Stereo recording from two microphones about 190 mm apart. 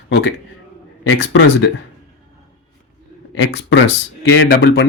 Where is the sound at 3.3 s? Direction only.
70° left (ahead or behind).